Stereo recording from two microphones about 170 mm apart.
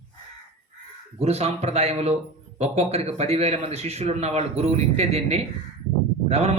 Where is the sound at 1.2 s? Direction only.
40° right (ahead or behind).